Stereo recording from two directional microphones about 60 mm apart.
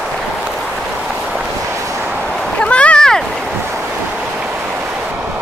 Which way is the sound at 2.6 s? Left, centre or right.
Centre.